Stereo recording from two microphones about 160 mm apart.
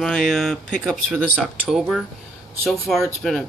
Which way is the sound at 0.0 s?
5° left (ahead or behind).